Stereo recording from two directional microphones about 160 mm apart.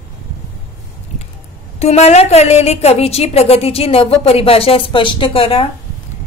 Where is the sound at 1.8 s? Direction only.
45° left (ahead or behind).